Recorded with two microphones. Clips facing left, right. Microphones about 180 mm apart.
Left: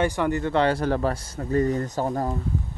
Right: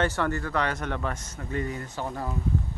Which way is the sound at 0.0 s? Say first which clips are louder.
Left 4 dB; 15° left (ahead or behind).